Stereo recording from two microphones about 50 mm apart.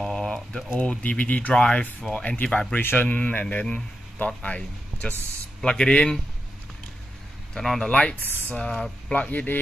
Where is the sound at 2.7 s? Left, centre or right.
Left.